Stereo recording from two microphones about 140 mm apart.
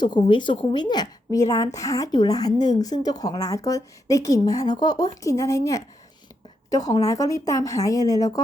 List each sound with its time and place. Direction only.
0.0 s a woman's voice: 30° left (ahead or behind)